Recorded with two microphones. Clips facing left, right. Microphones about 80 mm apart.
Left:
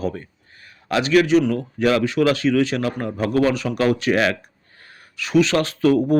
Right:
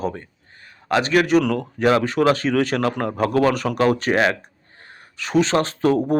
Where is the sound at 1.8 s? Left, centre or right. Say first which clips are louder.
Right 1 dB; right.